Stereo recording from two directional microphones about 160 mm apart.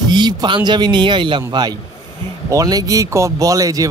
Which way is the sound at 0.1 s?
25° right (ahead or behind).